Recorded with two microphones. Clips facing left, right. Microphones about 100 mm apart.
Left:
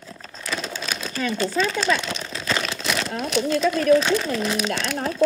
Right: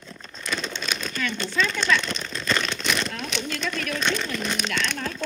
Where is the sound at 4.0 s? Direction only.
5° left (ahead or behind).